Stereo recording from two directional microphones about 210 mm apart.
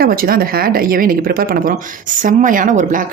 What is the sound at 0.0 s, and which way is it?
Speech, 45° right (ahead or behind).